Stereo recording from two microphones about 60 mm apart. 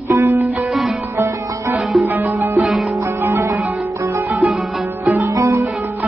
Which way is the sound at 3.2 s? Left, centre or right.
Right.